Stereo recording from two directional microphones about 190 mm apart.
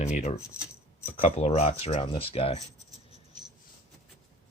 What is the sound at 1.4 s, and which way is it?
Speech, 35° left (ahead or behind).